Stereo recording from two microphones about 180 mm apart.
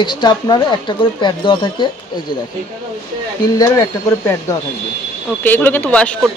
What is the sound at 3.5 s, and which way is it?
Speech, 15° left (ahead or behind).